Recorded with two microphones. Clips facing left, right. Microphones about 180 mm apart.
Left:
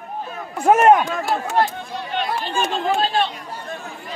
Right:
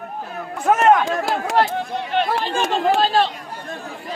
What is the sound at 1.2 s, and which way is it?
Speech, 90° right.